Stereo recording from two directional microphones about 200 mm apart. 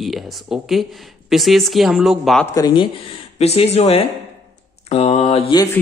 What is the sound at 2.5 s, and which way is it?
Speech, 20° left (ahead or behind).